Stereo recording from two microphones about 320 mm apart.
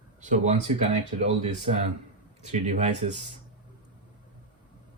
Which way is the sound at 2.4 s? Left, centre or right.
Right.